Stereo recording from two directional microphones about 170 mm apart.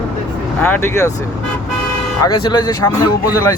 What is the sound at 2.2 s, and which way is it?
Speech, 25° left (ahead or behind).